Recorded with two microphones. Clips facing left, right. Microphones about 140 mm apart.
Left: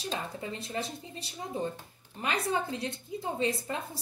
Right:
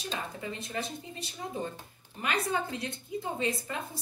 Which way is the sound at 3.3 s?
30° left (ahead or behind).